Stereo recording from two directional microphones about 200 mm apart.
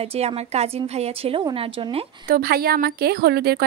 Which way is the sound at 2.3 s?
50° right (ahead or behind).